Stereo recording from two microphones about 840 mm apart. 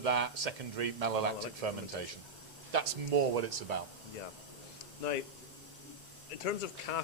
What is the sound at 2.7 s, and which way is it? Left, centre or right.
Speech, right.